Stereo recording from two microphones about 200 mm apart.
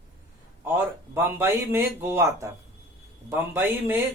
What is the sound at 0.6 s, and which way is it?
Speech, 10° right (ahead or behind).